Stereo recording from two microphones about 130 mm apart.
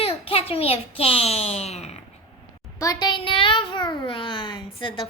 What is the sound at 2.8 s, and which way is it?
A child's voice, 30° left (ahead or behind).